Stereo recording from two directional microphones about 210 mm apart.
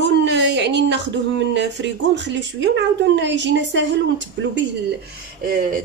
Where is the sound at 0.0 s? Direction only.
55° right (ahead or behind).